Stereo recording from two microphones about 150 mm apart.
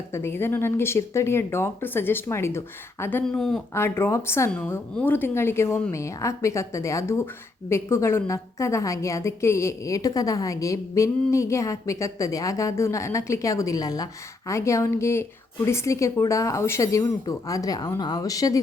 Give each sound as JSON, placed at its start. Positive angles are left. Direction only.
{"t": 0.1, "sound": "speech", "side_deg": 15}
{"t": 3.8, "sound": "a woman's voice", "side_deg": 15}